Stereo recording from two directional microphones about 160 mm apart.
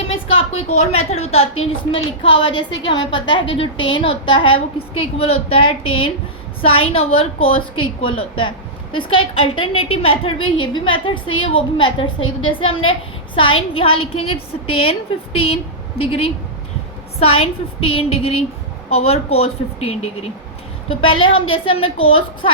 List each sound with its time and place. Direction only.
0.0 s a woman's voice: 35° left (ahead or behind)